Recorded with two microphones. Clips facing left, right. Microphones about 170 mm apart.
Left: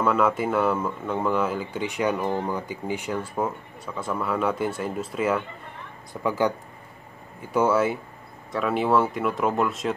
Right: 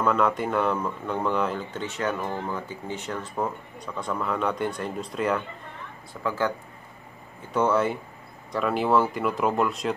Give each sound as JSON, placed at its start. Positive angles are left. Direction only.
{"t": 0.0, "sound": "speech", "side_deg": 5}
{"t": 6.2, "sound": "speech", "side_deg": 15}
{"t": 7.5, "sound": "speech", "side_deg": 5}